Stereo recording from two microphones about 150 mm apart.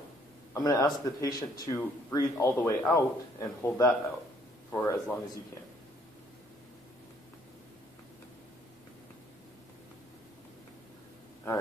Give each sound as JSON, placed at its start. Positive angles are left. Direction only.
{"t": 0.6, "sound": "a man's voice", "side_deg": 25}